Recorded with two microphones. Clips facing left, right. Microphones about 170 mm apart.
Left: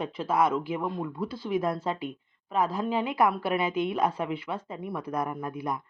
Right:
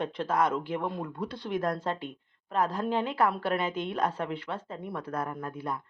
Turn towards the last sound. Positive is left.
turn(degrees=15)  # may be behind; listen again after turning